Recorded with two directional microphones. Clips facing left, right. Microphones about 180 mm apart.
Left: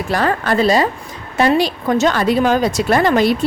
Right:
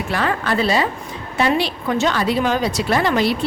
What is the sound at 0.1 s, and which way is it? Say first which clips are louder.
A woman's voice: left 4 dB; 40° left (ahead or behind).